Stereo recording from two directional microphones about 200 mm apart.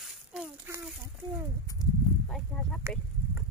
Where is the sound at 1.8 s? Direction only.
20° left (ahead or behind).